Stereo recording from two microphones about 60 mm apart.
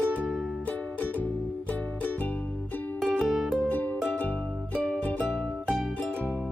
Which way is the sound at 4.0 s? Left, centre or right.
Left.